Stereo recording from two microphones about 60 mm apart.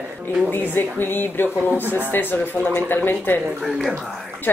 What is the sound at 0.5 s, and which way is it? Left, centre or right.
Speech, left.